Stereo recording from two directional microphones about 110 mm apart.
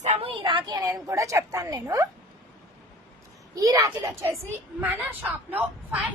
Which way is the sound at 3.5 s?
35° right (ahead or behind).